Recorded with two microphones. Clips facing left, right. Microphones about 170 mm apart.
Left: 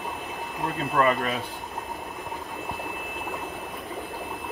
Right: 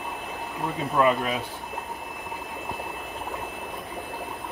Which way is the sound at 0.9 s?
10° right (ahead or behind).